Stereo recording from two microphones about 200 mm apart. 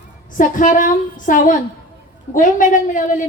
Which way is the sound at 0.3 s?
40° left (ahead or behind).